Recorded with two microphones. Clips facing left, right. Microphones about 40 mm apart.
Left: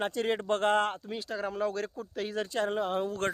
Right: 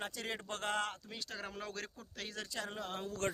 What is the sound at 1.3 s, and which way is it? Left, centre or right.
Speech, centre.